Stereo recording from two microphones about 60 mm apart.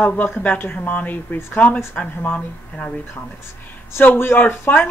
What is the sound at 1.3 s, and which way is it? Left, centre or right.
Speech, left.